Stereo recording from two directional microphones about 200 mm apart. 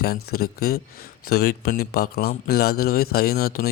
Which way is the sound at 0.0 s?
50° left (ahead or behind).